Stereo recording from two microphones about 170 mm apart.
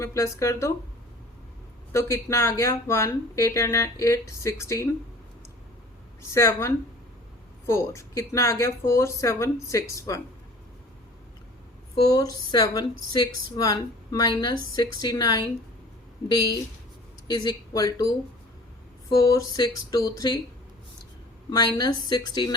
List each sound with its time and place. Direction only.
0.0 s speech: 15° left (ahead or behind)
1.9 s speech: 15° left (ahead or behind)
6.3 s speech: 15° left (ahead or behind)
12.0 s speech: 20° left (ahead or behind)
21.5 s speech: 25° left (ahead or behind)